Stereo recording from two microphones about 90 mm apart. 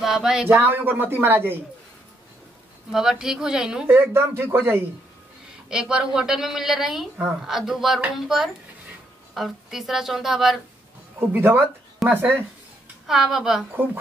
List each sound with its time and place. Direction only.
0.0 s speech: 5° right (ahead or behind)
0.5 s speech: 25° right (ahead or behind)
2.9 s a woman's voice: 5° right (ahead or behind)
3.8 s speech: 25° right (ahead or behind)
5.7 s a woman's voice: 10° right (ahead or behind)
11.1 s speech: 25° right (ahead or behind)
13.0 s a woman's voice: 5° right (ahead or behind)